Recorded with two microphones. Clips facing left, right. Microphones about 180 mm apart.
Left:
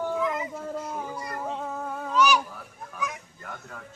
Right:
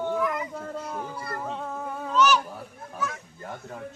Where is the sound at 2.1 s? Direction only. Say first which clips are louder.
Right 1 dB; 10° left (ahead or behind).